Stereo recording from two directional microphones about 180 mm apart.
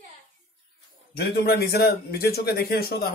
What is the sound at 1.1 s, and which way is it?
Speech, 60° left (ahead or behind).